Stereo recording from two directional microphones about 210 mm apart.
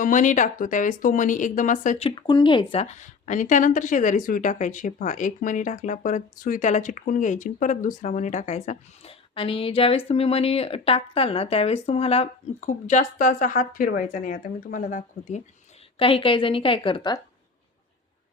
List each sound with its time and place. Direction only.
0.0 s speech: 40° left (ahead or behind)
16.0 s a woman's voice: 25° left (ahead or behind)